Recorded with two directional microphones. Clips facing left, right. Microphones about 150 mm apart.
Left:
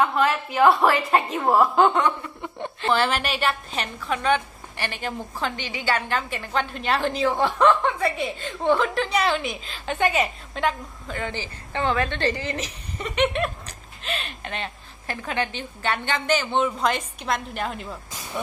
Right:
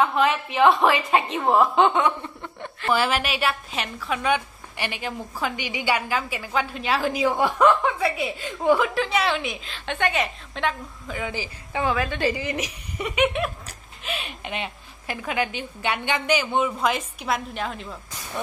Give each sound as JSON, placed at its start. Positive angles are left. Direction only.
{"t": 0.0, "sound": "a woman's voice", "side_deg": 0}
{"t": 2.4, "sound": "a sound", "side_deg": 20}
{"t": 2.9, "sound": "a woman's voice", "side_deg": -5}